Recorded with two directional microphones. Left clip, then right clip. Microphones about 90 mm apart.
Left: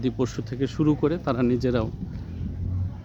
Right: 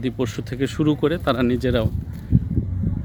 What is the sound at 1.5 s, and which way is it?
Speech, 10° right (ahead or behind).